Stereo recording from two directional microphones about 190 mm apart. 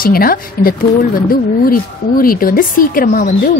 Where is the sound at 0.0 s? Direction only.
50° left (ahead or behind).